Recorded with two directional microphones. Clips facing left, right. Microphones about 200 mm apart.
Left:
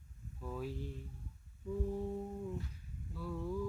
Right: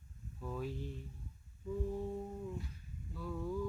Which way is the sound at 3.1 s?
5° left (ahead or behind).